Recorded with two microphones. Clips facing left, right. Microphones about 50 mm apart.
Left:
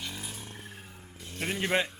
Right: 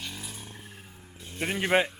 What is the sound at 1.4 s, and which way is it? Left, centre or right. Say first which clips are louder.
Speech: right 4 dB; centre.